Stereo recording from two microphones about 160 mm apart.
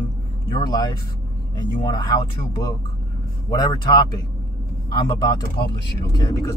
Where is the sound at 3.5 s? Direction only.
25° left (ahead or behind).